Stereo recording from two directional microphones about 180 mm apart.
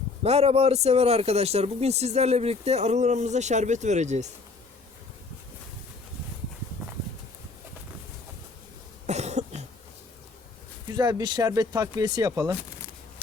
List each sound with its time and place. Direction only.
0.2 s a man's voice: 35° right (ahead or behind)
9.0 s cough: 40° right (ahead or behind)
10.8 s speech: 20° right (ahead or behind)